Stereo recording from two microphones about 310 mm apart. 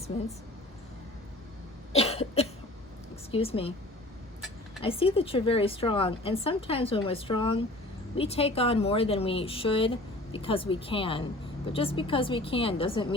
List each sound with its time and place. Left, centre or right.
0.1 s a woman's voice: centre
1.9 s cough: centre
3.3 s a woman's voice: centre
4.8 s speech: centre